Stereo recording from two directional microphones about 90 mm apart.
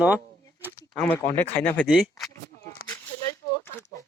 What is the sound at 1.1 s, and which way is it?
Speech, 20° left (ahead or behind).